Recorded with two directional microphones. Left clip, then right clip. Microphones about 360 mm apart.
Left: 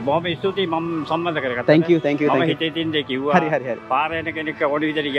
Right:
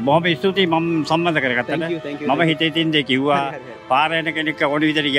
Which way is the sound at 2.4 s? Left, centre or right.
Right.